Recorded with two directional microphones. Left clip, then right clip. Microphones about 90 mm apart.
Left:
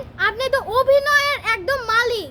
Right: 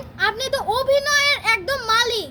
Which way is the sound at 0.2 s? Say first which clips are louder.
Left 2 dB; 25° left (ahead or behind).